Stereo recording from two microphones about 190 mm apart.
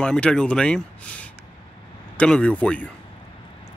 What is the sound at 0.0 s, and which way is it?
Speech, 5° left (ahead or behind).